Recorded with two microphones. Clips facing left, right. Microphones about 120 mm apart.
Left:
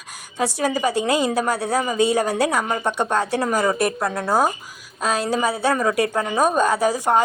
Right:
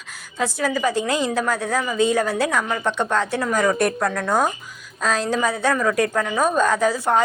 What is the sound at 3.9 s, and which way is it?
Speech, 25° left (ahead or behind).